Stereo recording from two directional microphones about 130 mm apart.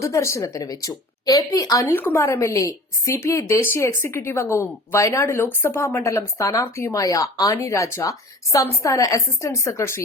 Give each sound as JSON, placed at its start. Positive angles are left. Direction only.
{"t": 0.0, "sound": "speech", "side_deg": 25}